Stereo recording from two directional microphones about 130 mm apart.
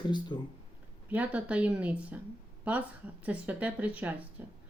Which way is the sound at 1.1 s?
10° right (ahead or behind).